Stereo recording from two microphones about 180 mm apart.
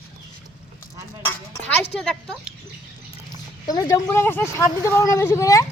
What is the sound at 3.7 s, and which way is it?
Speech, 20° left (ahead or behind).